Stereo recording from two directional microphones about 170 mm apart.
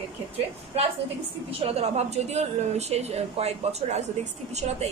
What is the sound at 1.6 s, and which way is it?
Speech, 40° right (ahead or behind).